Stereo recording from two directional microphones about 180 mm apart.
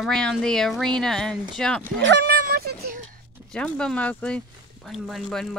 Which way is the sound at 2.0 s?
80° right.